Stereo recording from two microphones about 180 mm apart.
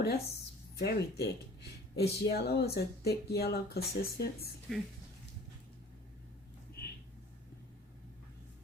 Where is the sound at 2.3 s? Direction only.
65° left (ahead or behind).